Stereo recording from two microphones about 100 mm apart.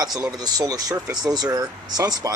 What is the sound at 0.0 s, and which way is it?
Speech, 40° right (ahead or behind).